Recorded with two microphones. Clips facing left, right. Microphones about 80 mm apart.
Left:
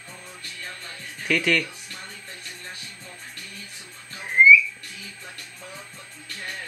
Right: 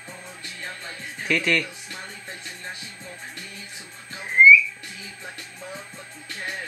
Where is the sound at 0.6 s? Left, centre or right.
Right.